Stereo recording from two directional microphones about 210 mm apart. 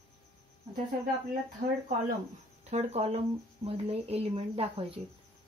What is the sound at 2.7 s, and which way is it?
Speech, 30° right (ahead or behind).